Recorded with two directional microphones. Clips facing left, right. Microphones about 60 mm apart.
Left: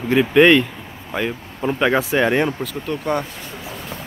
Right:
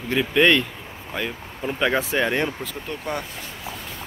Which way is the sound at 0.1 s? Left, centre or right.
Left.